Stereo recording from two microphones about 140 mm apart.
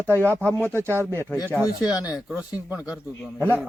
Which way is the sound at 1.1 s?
15° left (ahead or behind).